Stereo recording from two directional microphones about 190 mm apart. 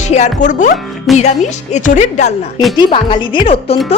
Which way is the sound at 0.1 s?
40° left (ahead or behind).